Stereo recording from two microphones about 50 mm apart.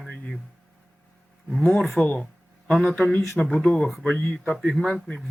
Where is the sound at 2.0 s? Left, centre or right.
Left.